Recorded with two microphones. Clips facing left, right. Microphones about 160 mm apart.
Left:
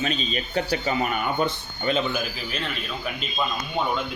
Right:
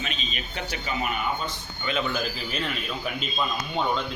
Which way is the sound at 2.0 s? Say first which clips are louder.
Left 1 dB; 10° left (ahead or behind).